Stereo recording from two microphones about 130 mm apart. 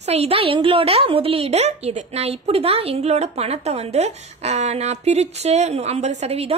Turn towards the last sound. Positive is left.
turn(degrees=-55)  # may be behind; listen again after turning